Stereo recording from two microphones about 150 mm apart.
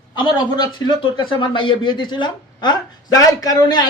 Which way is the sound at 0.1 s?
30° left (ahead or behind).